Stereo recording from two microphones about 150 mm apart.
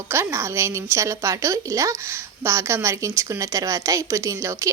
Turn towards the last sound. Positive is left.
turn(degrees=-20)  # may be behind; listen again after turning